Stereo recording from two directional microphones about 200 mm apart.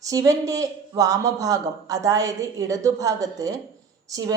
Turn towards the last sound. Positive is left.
turn(degrees=-15)  # may be behind; listen again after turning